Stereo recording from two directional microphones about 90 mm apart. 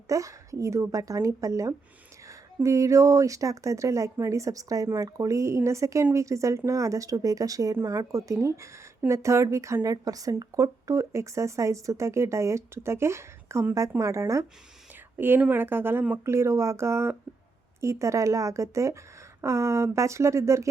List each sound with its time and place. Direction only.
0.1 s speech: 35° right (ahead or behind)
15.4 s speech: 20° right (ahead or behind)